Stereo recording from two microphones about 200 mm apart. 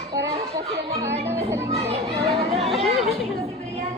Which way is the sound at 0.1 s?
15° right (ahead or behind).